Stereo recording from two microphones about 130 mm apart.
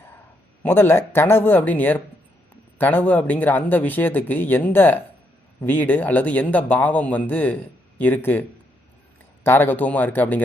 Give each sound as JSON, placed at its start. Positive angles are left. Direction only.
{"t": 0.6, "sound": "speech", "side_deg": 15}